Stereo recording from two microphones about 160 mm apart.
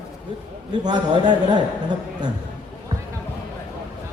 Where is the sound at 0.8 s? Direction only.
25° right (ahead or behind).